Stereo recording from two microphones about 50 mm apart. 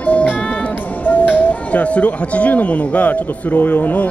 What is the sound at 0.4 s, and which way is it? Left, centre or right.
Music, centre.